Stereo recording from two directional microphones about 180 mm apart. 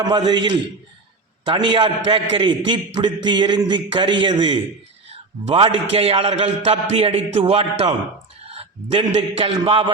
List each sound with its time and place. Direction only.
0.0 s a man's voice: 25° right (ahead or behind)